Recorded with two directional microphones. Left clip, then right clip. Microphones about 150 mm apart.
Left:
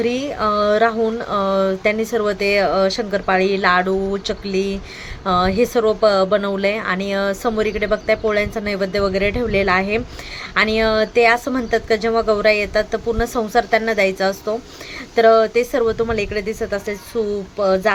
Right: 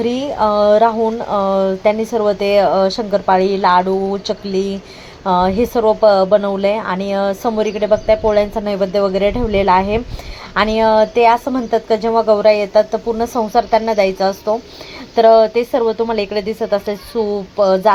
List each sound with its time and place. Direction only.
0.0 s speech: 5° right (ahead or behind)